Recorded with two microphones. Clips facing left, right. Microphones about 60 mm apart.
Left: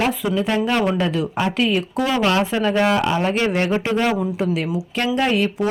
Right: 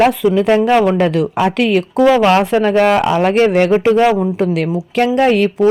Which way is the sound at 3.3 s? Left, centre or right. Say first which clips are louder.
Right 8 dB; right.